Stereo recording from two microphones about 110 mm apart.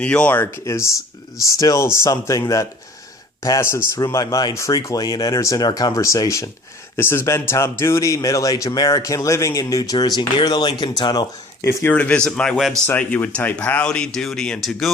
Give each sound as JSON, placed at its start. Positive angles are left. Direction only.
{"t": 0.0, "sound": "speech", "side_deg": 10}
{"t": 0.6, "sound": "speech", "side_deg": 25}
{"t": 11.6, "sound": "speech", "side_deg": 25}
{"t": 12.9, "sound": "speech", "side_deg": 15}